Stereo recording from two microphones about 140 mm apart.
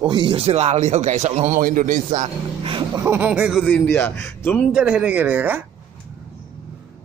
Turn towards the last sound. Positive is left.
turn(degrees=-15)  # may be behind; listen again after turning